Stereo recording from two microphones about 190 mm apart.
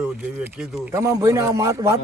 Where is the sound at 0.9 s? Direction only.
15° right (ahead or behind).